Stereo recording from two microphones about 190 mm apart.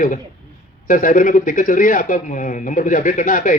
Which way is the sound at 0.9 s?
45° left (ahead or behind).